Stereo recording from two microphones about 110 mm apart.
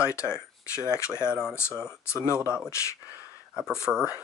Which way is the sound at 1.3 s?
5° right (ahead or behind).